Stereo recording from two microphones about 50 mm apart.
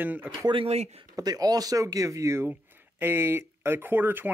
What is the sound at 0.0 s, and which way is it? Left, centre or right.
Speech, right.